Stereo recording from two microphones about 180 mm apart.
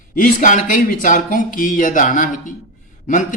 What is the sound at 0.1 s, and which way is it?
Speech, 50° left (ahead or behind).